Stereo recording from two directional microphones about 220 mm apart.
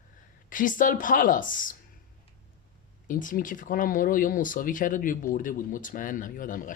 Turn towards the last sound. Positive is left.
turn(degrees=35)  # may be behind; listen again after turning